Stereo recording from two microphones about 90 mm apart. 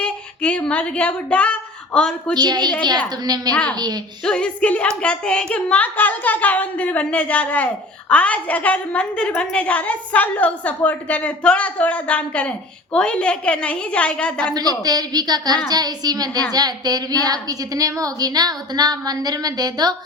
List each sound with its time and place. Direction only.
0.0 s speech: 15° left (ahead or behind)
2.3 s a woman's voice: 50° right (ahead or behind)
3.5 s a woman's voice: 15° left (ahead or behind)
14.5 s a woman's voice: 45° right (ahead or behind)